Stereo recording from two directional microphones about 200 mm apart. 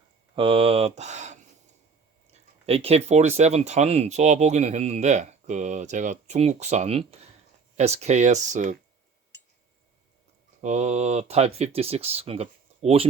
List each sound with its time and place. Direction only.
0.3 s speech: 25° right (ahead or behind)
2.6 s speech: 30° right (ahead or behind)
10.6 s speech: 35° right (ahead or behind)